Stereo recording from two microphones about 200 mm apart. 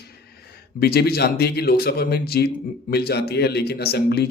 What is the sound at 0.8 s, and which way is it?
Speech, 50° left (ahead or behind).